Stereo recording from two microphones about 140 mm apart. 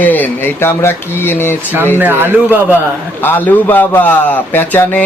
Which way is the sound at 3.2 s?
15° left (ahead or behind).